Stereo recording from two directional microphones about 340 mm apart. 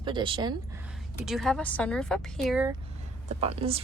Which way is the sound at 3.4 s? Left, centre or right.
Centre.